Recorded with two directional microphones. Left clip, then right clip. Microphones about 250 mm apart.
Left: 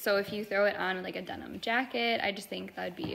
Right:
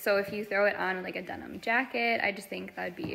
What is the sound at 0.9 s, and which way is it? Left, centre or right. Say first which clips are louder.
Speech: right 1 dB; left.